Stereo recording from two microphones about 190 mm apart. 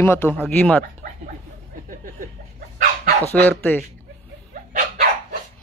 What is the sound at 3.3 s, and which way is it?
Speech, 10° left (ahead or behind).